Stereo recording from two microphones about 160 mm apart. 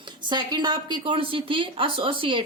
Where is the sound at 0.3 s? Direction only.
30° right (ahead or behind).